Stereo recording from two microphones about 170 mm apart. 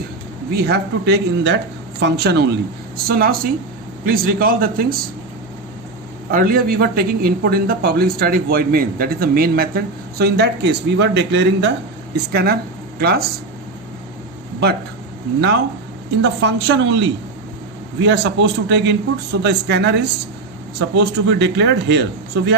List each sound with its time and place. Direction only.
0.5 s a man's voice: 70° right (ahead or behind)
3.1 s a man's voice: 60° right (ahead or behind)
6.3 s a man's voice: 60° right (ahead or behind); by 11.7 s 90° right
12.1 s speech: 70° right (ahead or behind)
16.2 s a man's voice: 90° right